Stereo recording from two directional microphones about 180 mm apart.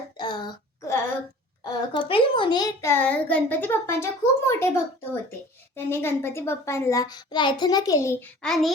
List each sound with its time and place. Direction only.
0.2 s a sound: 25° left (ahead or behind)
1.6 s a child's voice: 25° left (ahead or behind)
5.7 s a child's voice: 15° left (ahead or behind)
8.4 s a child's voice: centre (ahead or behind)